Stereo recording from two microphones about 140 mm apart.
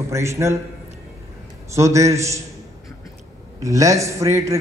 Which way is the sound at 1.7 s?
20° right (ahead or behind).